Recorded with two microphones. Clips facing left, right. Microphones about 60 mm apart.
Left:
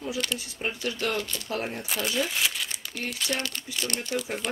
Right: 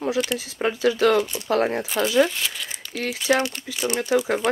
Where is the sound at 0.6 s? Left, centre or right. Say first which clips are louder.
Right 11 dB; right.